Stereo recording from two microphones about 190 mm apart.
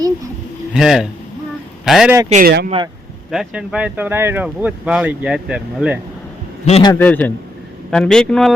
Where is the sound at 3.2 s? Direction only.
5° right (ahead or behind).